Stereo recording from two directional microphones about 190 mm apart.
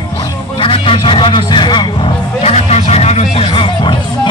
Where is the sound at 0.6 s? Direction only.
25° left (ahead or behind).